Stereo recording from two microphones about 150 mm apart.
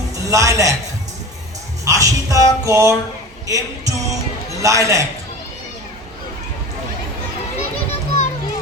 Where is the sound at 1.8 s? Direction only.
20° right (ahead or behind).